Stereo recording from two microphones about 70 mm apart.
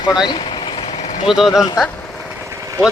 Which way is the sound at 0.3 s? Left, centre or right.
Left.